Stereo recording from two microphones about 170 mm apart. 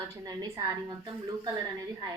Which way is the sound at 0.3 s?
25° right (ahead or behind).